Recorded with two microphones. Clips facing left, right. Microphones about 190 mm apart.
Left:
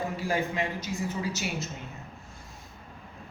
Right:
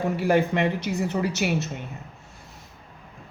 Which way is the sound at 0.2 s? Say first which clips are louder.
Right 9 dB; 65° right (ahead or behind).